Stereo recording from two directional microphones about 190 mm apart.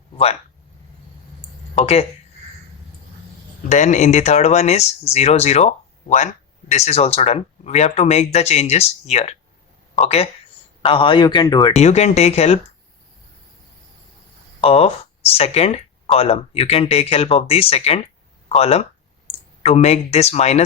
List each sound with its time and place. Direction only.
1.7 s speech: 35° left (ahead or behind)
3.7 s a man's voice: 40° left (ahead or behind); by 11.7 s 20° left (ahead or behind)
11.7 s speech: 35° left (ahead or behind)
14.6 s speech: 30° left (ahead or behind)